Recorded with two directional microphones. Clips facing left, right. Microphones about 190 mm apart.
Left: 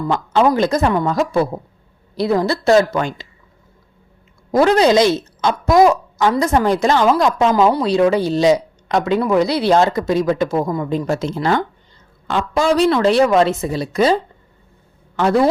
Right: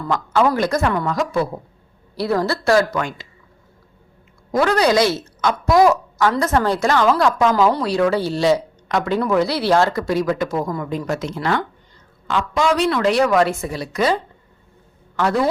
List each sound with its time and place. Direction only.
0.1 s speech: 20° left (ahead or behind)
4.5 s a woman's voice: 25° left (ahead or behind)